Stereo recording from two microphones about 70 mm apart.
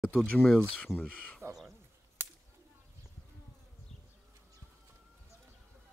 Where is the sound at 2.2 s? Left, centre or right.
Right.